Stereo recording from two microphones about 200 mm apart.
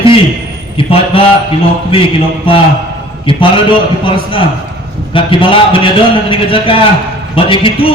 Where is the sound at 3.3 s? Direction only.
25° left (ahead or behind).